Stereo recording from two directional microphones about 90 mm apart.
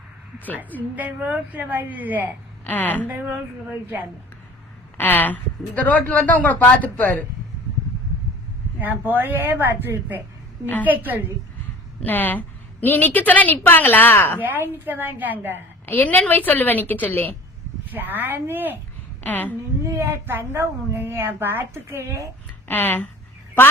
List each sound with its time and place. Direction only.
0.8 s a woman's voice: 15° right (ahead or behind)
2.6 s a woman's voice: 20° left (ahead or behind)
3.1 s a woman's voice: 20° right (ahead or behind)
4.9 s a woman's voice: 20° left (ahead or behind)
8.8 s a woman's voice: 20° right (ahead or behind)
12.0 s a woman's voice: 20° left (ahead or behind)
14.4 s a woman's voice: 20° right (ahead or behind)
15.9 s a woman's voice: 20° left (ahead or behind)
17.9 s a woman's voice: 20° right (ahead or behind)
19.2 s a woman's voice: 20° left (ahead or behind)
19.8 s a woman's voice: 35° right (ahead or behind)
22.7 s a woman's voice: 20° left (ahead or behind)